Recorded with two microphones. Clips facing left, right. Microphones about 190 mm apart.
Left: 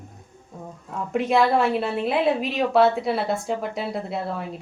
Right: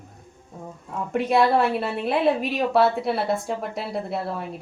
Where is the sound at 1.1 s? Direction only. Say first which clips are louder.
Even; centre (ahead or behind).